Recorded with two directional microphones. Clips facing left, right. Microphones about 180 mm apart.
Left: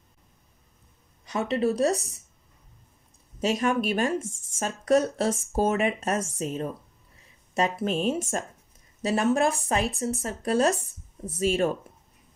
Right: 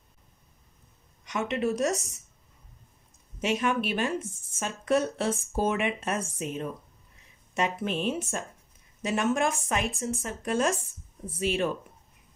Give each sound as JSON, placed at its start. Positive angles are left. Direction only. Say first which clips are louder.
{"t": 1.2, "sound": "speech", "louder": "left 3 dB", "side_deg": 35}
{"t": 3.3, "sound": "speech", "louder": "left 2 dB", "side_deg": 40}